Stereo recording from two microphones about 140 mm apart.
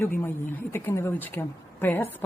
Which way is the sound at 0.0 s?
15° left (ahead or behind).